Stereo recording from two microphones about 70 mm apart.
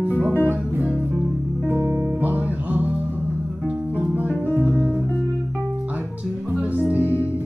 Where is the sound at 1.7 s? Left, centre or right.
Right.